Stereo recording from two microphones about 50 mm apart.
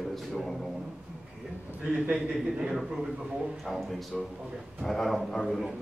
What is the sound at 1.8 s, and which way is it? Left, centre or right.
Speech, right.